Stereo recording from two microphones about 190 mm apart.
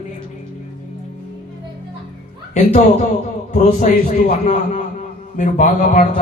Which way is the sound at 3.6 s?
40° left (ahead or behind).